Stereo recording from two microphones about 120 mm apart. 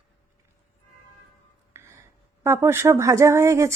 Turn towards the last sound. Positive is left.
turn(degrees=-25)  # may be behind; listen again after turning